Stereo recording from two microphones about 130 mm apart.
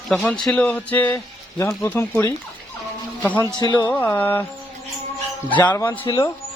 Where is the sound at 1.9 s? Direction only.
20° left (ahead or behind).